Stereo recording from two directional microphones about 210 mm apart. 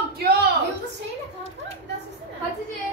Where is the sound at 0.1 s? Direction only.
45° right (ahead or behind).